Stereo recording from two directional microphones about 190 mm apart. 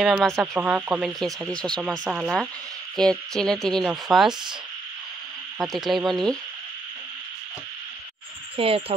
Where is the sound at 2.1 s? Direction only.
5° right (ahead or behind).